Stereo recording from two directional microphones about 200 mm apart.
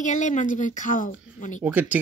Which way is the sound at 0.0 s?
40° left (ahead or behind).